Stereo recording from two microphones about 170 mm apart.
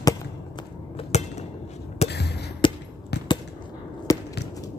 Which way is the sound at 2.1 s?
75° left (ahead or behind).